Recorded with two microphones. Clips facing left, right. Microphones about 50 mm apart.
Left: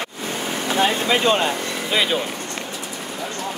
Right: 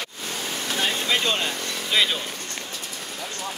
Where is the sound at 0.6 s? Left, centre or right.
Left.